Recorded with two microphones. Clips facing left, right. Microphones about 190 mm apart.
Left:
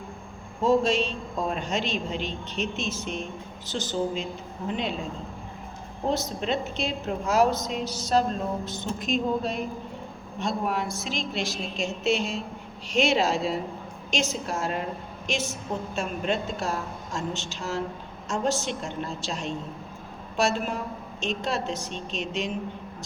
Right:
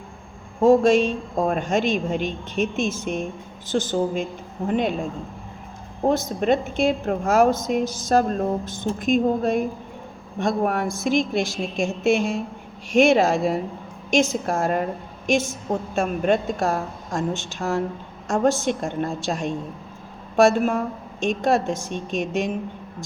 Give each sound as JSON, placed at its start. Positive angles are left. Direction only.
{"t": 0.6, "sound": "a woman's voice", "side_deg": -50}
{"t": 6.1, "sound": "a woman's voice", "side_deg": -50}